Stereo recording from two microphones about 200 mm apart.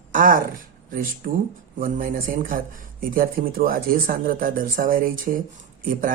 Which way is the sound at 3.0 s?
45° right (ahead or behind).